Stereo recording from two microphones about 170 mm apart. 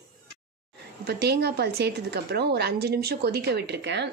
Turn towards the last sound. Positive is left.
turn(degrees=-85)